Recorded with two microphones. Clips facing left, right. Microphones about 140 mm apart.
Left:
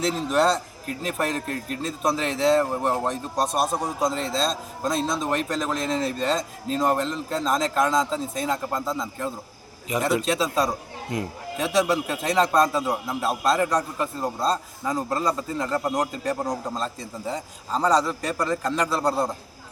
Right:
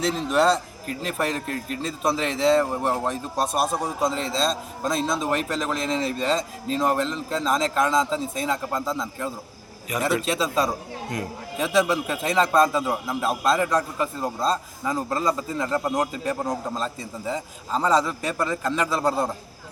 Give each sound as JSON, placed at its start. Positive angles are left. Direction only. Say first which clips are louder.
{"t": 0.0, "sound": "a man's voice", "louder": "right 1 dB", "side_deg": 0}
{"t": 9.9, "sound": "a man's voice", "louder": "left 2 dB", "side_deg": 25}
{"t": 10.2, "sound": "a man's voice", "louder": "even", "side_deg": 0}